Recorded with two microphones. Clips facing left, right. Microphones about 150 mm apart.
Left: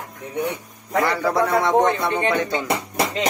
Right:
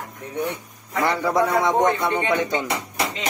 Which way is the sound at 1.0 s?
20° right (ahead or behind).